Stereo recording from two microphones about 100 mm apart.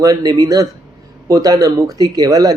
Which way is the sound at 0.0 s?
40° right (ahead or behind).